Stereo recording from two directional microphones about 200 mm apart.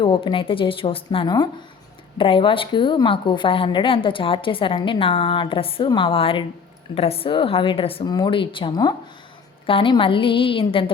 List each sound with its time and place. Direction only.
0.0 s a woman's voice: 25° left (ahead or behind)